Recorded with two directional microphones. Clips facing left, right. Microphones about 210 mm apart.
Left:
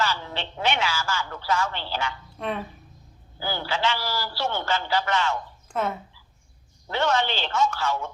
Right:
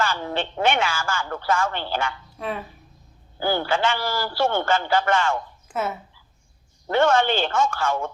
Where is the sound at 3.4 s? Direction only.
55° right (ahead or behind).